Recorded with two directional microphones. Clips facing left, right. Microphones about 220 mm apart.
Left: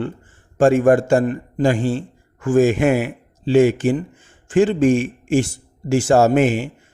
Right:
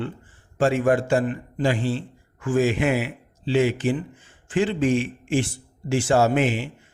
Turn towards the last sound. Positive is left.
turn(degrees=45)  # may be behind; listen again after turning